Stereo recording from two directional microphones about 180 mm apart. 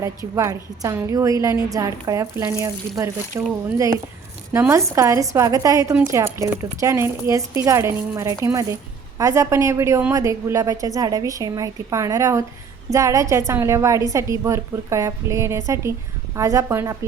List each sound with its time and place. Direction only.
0.0 s a woman's voice: 15° right (ahead or behind)